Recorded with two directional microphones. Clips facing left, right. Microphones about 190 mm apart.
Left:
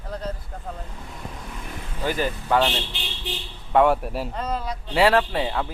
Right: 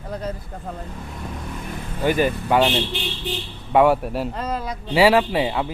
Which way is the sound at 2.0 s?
15° right (ahead or behind).